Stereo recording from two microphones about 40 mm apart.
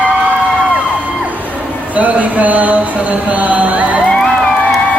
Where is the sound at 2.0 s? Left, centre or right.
Right.